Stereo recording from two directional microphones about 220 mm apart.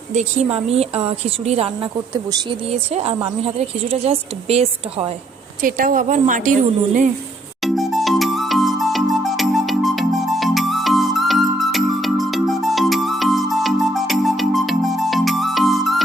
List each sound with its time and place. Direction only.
0.1 s a woman's voice: 30° right (ahead or behind)
5.6 s a woman's voice: 40° right (ahead or behind)
7.6 s music: centre (ahead or behind)